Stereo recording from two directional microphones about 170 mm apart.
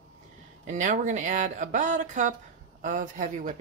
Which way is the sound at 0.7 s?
45° right (ahead or behind).